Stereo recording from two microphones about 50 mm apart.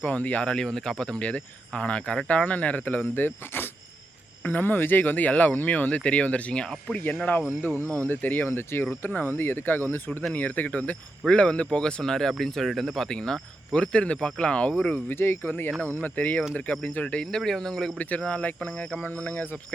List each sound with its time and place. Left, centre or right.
0.0 s speech: left
0.4 s speech: centre
7.3 s speech: left
8.4 s speech: left
9.0 s speech: left; by 13.1 s centre
13.1 s speech: centre
15.1 s speech: left
17.3 s speech: centre
17.9 s speech: left
19.3 s speech: left